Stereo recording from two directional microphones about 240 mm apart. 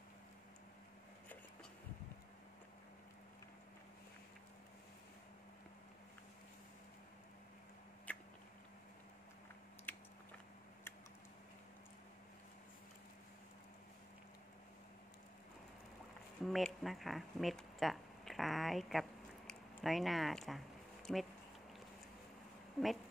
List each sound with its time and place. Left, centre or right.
8.1 s a sound: centre
9.9 s biting: centre
16.4 s speech: centre
22.8 s speech: centre